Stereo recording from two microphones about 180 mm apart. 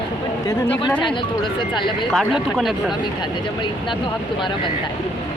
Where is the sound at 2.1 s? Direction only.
Centre (ahead or behind).